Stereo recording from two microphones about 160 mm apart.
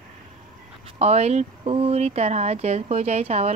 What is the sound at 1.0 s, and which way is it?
A woman's voice, 40° right (ahead or behind).